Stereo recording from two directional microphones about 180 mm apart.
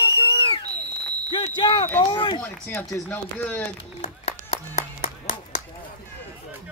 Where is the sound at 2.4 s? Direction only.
10° left (ahead or behind).